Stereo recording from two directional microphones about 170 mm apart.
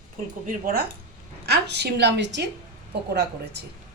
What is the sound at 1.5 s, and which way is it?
A woman's voice, 80° right.